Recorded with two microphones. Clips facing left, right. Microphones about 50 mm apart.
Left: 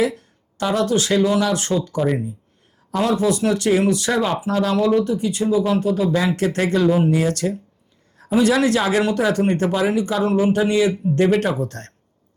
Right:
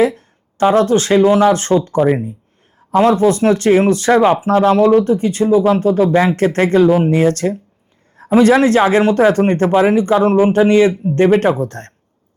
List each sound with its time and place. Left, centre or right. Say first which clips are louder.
0.0 s speech: right 6 dB; right